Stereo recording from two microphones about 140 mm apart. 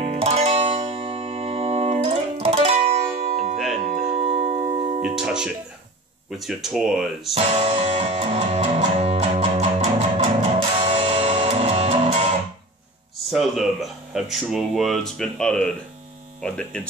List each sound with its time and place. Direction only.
0.0 s music: 45° right (ahead or behind)
5.0 s music: 5° right (ahead or behind)
6.3 s speech: centre (ahead or behind)
7.3 s music: 45° right (ahead or behind)
13.3 s speech: centre (ahead or behind)